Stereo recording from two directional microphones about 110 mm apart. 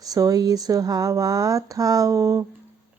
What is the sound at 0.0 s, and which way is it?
Speech, 35° right (ahead or behind).